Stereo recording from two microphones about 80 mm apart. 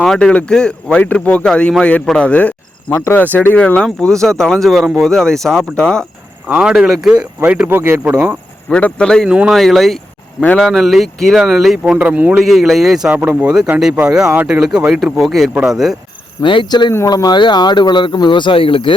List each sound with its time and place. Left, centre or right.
0.0 s speech: centre
3.8 s speech: centre
6.6 s a man's voice: centre
7.8 s a man's voice: right
8.7 s speech: centre
9.2 s speech: centre
9.5 s speech: centre
11.9 s a man's voice: centre
12.5 s speech: centre
16.4 s speech: left
17.1 s speech: left